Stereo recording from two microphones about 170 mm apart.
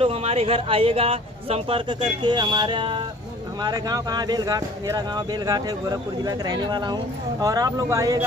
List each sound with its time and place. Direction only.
0.0 s speech: 35° right (ahead or behind); by 8.2 s 20° right (ahead or behind)